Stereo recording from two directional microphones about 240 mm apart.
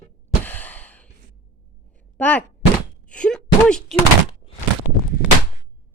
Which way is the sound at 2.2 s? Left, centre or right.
Centre.